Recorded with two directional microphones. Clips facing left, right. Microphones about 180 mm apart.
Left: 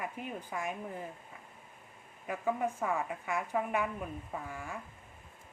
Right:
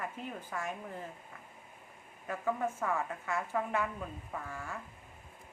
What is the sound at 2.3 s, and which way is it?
A woman's voice, 15° left (ahead or behind).